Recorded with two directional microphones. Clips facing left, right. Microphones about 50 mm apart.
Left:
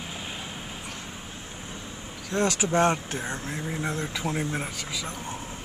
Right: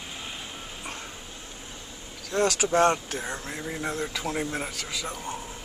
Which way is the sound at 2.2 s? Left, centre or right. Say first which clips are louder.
Right 1 dB; centre.